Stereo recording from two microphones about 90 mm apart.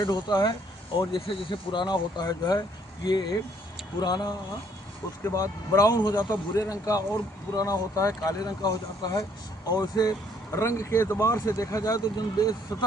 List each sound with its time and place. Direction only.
0.0 s speech: 50° left (ahead or behind)
0.9 s speech: 65° left (ahead or behind); by 4.4 s 50° left (ahead or behind)
5.2 s speech: 35° left (ahead or behind)
10.5 s speech: 35° left (ahead or behind)